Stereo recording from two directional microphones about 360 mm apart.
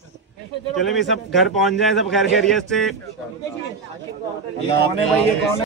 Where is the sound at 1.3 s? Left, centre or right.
Centre.